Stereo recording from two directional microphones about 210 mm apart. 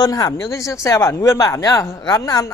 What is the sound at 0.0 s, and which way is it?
Speech, 15° left (ahead or behind).